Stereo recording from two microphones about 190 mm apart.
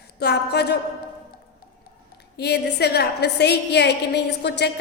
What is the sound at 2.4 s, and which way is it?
A woman's voice, 60° left (ahead or behind).